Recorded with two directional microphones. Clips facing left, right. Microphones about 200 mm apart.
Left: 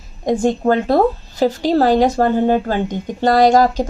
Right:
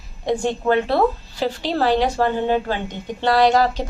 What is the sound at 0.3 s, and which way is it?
A woman's voice, 40° left (ahead or behind).